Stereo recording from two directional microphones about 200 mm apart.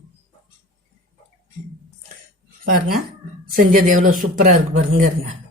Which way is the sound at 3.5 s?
45° right (ahead or behind).